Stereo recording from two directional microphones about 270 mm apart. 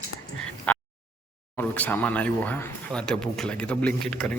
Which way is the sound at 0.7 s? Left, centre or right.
Centre.